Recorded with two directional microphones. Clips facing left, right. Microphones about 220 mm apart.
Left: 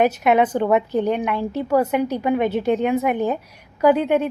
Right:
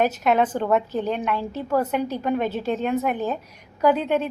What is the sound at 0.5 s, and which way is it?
A woman's voice, 15° left (ahead or behind).